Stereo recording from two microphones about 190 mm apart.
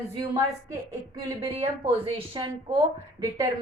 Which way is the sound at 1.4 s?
25° right (ahead or behind).